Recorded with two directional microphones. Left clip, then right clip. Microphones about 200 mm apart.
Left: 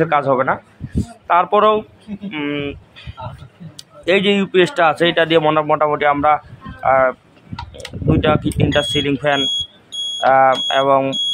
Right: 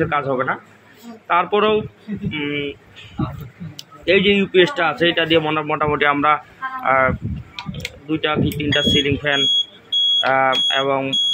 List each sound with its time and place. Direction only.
0.0 s a man's voice: 30° left (ahead or behind)